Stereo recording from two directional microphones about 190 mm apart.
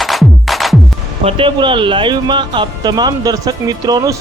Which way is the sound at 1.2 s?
30° right (ahead or behind).